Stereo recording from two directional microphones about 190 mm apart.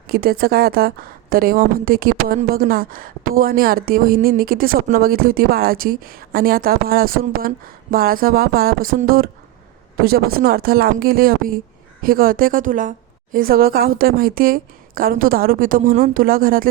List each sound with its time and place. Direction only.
0.1 s speech: 55° right (ahead or behind)